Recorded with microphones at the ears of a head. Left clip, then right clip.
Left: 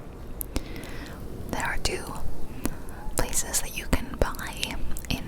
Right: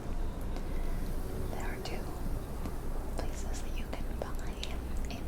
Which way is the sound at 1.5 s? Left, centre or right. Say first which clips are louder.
Left 14 dB; left.